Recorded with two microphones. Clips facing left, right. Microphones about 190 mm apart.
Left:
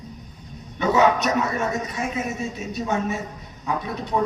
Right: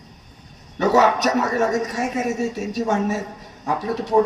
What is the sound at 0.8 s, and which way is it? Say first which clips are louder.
A man's voice: right 2 dB; 40° right (ahead or behind).